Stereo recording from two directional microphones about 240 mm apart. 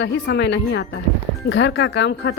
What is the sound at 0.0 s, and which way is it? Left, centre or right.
A woman's voice, left.